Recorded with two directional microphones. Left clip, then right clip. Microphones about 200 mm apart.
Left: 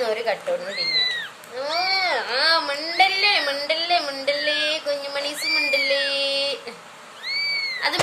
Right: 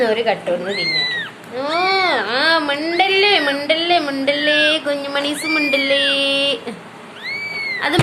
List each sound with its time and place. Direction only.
0.0 s speech: 10° left (ahead or behind)